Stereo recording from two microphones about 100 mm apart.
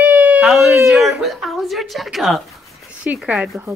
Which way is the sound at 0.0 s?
15° right (ahead or behind).